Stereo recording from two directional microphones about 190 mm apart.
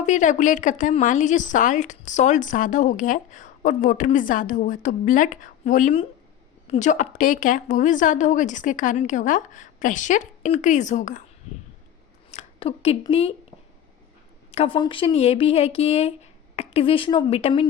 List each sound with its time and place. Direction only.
0.0 s a woman's voice: 40° left (ahead or behind)
12.3 s speech: 30° left (ahead or behind)
14.5 s a woman's voice: 30° left (ahead or behind)